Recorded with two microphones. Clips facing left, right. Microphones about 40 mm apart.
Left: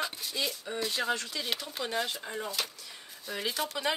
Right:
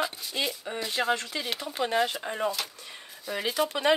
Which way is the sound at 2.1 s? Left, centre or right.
Right.